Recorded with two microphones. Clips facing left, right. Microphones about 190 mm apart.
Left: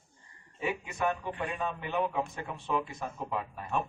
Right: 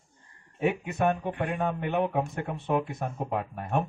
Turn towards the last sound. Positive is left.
turn(degrees=-60)  # may be behind; listen again after turning